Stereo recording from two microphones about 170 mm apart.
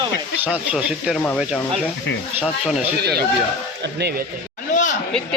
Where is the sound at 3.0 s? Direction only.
70° right (ahead or behind).